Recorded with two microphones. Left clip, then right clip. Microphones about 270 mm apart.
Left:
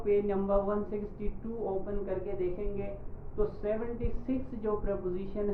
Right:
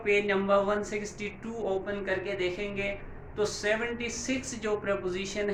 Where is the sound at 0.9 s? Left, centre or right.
Centre.